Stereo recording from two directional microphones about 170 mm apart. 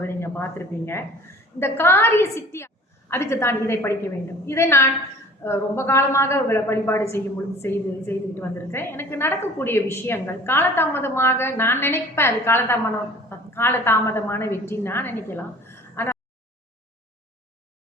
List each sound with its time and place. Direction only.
0.0 s a woman's voice: 15° left (ahead or behind)